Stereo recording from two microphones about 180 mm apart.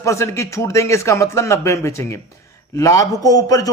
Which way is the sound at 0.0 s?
15° left (ahead or behind).